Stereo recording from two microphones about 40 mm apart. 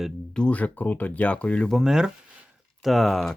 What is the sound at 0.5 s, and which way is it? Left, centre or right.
Speech, left.